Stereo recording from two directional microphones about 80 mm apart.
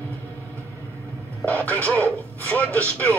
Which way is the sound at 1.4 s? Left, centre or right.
Left.